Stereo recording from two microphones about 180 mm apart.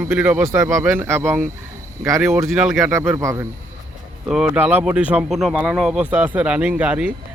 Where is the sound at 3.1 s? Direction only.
15° right (ahead or behind).